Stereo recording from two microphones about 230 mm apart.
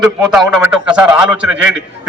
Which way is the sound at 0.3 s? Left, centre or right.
Centre.